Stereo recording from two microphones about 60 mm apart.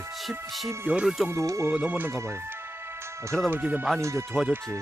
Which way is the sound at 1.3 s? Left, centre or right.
Right.